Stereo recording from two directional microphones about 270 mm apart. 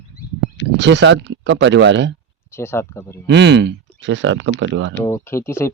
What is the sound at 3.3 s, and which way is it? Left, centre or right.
Speech, right.